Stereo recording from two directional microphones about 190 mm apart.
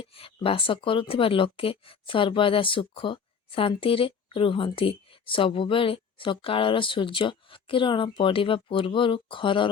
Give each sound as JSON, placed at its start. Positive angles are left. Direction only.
{"t": 0.0, "sound": "speech", "side_deg": 30}